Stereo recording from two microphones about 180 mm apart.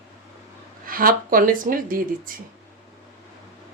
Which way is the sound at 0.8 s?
55° right (ahead or behind).